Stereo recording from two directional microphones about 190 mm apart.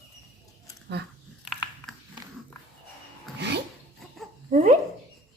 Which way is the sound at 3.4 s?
60° right (ahead or behind).